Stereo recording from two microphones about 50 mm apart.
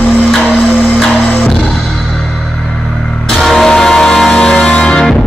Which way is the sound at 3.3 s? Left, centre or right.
Centre.